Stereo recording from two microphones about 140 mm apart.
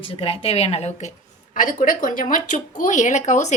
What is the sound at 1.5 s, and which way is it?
Speech, 70° left (ahead or behind).